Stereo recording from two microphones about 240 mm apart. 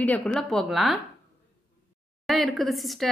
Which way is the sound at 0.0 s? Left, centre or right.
Centre.